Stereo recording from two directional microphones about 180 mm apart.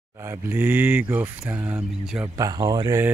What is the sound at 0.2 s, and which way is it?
Speech, 15° right (ahead or behind).